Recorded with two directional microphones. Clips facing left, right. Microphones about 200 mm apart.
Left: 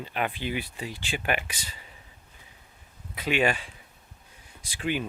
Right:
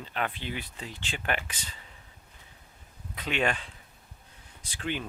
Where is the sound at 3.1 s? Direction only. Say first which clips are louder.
Left 4 dB; 10° left (ahead or behind).